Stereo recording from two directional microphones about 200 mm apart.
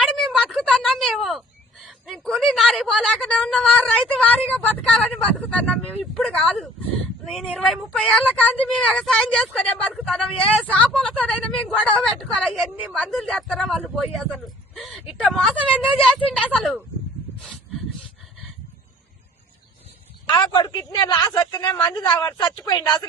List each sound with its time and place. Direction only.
0.0 s speech: centre (ahead or behind)
20.3 s a woman's voice: 25° left (ahead or behind)